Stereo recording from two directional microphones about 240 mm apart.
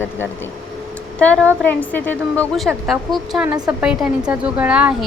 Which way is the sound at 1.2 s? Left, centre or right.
Centre.